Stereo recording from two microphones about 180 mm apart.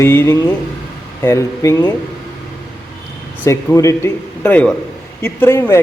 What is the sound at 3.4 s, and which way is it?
A man's voice, 15° left (ahead or behind).